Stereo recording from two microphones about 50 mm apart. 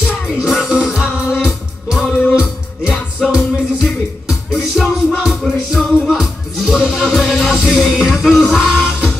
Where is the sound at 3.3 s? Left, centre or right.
Right.